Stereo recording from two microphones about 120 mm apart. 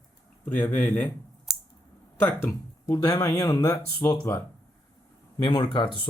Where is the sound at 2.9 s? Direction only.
30° left (ahead or behind).